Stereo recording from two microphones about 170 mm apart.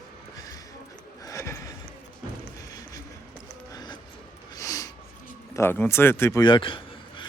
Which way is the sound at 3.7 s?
25° left (ahead or behind).